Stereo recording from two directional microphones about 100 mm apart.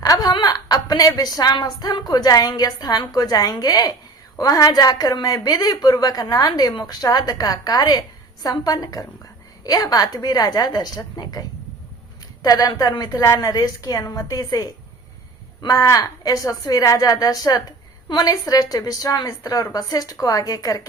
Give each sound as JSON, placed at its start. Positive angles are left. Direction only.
{"t": 0.0, "sound": "a sound", "side_deg": 40}
{"t": 0.3, "sound": "a woman's voice", "side_deg": 45}
{"t": 12.5, "sound": "a woman's voice", "side_deg": 40}